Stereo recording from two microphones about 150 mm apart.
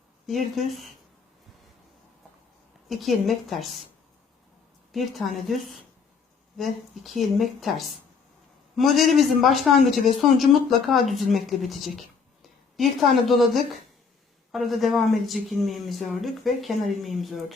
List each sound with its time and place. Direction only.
0.3 s speech: centre (ahead or behind)
2.9 s speech: centre (ahead or behind)
4.9 s speech: centre (ahead or behind)
6.6 s speech: centre (ahead or behind)